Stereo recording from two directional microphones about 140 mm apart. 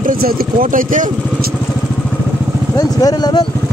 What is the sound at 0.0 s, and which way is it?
Speech, 85° right.